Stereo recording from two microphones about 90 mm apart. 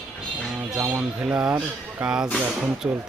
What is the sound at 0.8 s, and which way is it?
Speech, 20° right (ahead or behind).